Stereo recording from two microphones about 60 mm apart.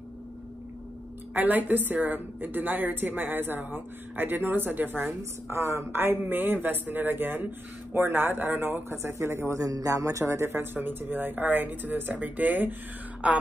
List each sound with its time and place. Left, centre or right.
1.3 s a woman's voice: right
5.6 s a woman's voice: right
9.6 s a man's voice: right
10.5 s a woman's voice: right